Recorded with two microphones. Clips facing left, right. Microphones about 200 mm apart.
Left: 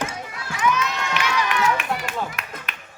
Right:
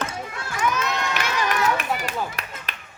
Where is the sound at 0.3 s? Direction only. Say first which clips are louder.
Left 2 dB; 45° right (ahead or behind).